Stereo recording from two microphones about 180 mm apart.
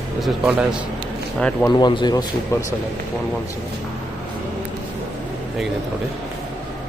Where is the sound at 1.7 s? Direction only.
25° left (ahead or behind).